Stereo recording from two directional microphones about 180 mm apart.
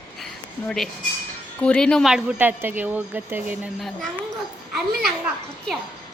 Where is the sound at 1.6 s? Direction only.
5° left (ahead or behind); by 3.7 s 10° right (ahead or behind).